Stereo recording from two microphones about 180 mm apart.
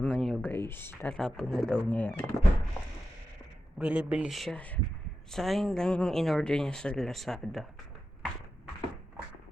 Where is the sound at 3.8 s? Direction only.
5° right (ahead or behind).